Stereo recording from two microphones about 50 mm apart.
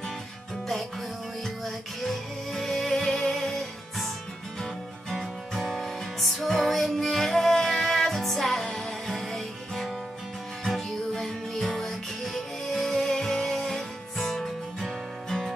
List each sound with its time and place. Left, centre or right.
1.4 s music: centre
5.6 s music: centre